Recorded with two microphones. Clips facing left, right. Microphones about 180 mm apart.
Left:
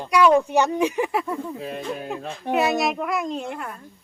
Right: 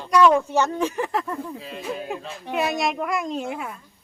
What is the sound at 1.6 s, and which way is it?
Speech, 50° left (ahead or behind).